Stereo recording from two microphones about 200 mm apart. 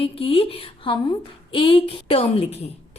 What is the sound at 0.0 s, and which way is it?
A woman's voice, 25° left (ahead or behind).